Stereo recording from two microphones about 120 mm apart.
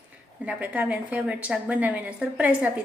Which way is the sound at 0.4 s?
10° right (ahead or behind).